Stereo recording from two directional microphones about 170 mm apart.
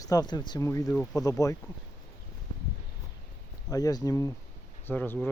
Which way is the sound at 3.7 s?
20° left (ahead or behind).